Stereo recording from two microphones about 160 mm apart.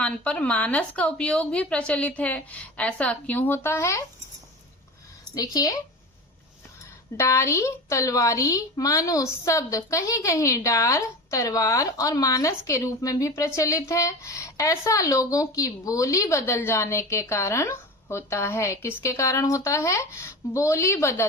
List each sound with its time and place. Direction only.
0.0 s speech: 10° left (ahead or behind)
5.3 s a woman's voice: 25° left (ahead or behind)
7.2 s a woman's voice: 20° left (ahead or behind)